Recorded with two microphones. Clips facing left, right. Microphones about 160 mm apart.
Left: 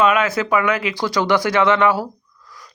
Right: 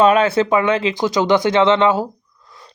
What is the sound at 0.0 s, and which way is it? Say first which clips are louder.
Speech: right 4 dB; 30° right (ahead or behind).